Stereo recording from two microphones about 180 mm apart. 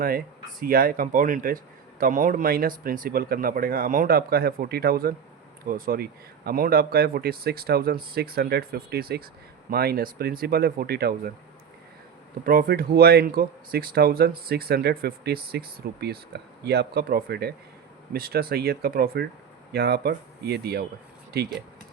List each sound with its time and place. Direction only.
0.6 s speech: 55° right (ahead or behind)
12.5 s speech: 55° right (ahead or behind)